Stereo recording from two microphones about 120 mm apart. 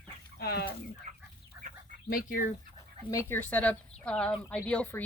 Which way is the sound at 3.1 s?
20° left (ahead or behind).